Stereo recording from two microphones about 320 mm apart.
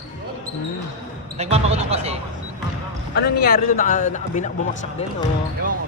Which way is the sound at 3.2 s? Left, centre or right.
Left.